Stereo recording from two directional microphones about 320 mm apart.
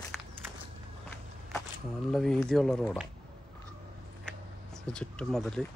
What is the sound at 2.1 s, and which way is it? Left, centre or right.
Speech, centre.